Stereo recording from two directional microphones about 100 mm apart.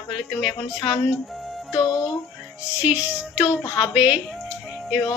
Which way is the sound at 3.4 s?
45° left (ahead or behind).